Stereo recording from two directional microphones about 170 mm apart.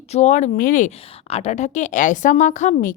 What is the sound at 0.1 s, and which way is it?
Speech, 40° left (ahead or behind).